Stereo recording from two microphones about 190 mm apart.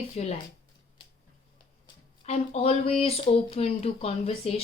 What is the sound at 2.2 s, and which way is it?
Speech, 35° left (ahead or behind).